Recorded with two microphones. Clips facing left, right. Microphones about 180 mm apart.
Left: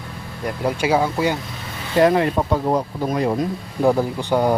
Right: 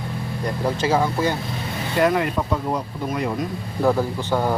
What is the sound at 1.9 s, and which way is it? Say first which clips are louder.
Speech: left 4 dB; 30° left (ahead or behind).